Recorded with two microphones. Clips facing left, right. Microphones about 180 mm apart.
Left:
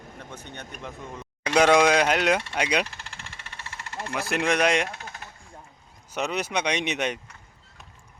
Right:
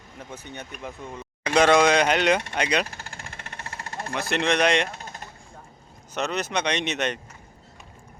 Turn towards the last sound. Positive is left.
turn(degrees=10)  # may be behind; listen again after turning